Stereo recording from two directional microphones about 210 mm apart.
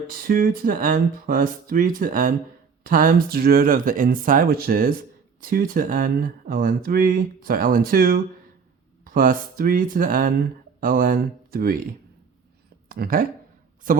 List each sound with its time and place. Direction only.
0.1 s speech: 45° right (ahead or behind)
12.9 s speech: 45° right (ahead or behind)